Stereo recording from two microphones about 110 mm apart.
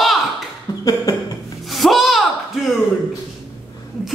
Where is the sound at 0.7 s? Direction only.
35° left (ahead or behind).